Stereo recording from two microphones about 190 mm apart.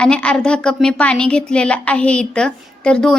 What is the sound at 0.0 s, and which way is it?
A woman's voice, 5° left (ahead or behind).